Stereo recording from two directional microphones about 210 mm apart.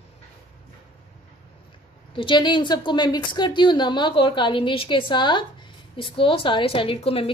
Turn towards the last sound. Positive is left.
turn(degrees=25)  # may be behind; listen again after turning